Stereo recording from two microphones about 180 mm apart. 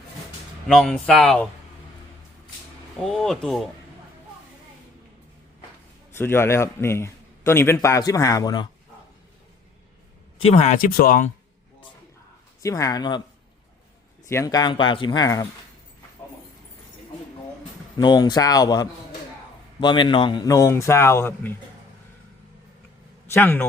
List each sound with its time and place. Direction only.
0.7 s speech: 5° left (ahead or behind)
3.0 s speech: centre (ahead or behind)
6.1 s a man's voice: 15° left (ahead or behind)
10.3 s speech: 35° left (ahead or behind); by 11.3 s 50° left (ahead or behind)
12.6 s speech: 20° left (ahead or behind)
14.3 s speech: 15° left (ahead or behind)
17.9 s a man's voice: 25° left (ahead or behind)
23.3 s a man's voice: 10° left (ahead or behind)